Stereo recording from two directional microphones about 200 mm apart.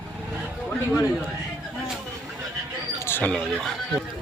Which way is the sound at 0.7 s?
10° left (ahead or behind).